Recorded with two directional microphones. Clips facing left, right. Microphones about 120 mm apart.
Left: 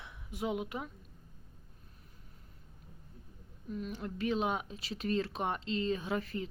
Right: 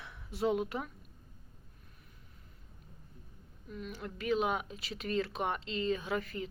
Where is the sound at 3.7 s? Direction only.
35° left (ahead or behind).